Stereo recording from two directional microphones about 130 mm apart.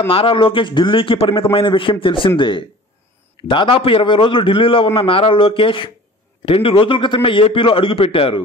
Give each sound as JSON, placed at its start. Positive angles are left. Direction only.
{"t": 0.1, "sound": "a man's voice", "side_deg": 45}